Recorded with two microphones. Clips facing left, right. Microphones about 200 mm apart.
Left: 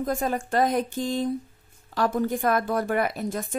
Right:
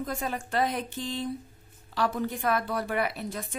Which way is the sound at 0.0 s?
45° left (ahead or behind).